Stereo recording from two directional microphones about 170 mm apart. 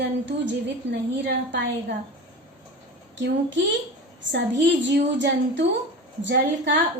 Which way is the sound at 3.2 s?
90° right.